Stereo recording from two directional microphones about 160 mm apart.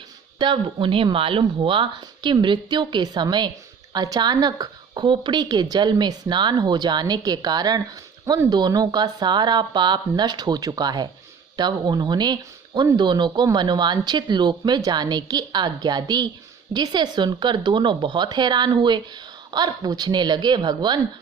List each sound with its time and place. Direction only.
0.3 s speech: 30° right (ahead or behind)